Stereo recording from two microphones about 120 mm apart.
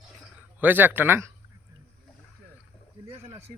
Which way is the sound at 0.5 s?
15° right (ahead or behind).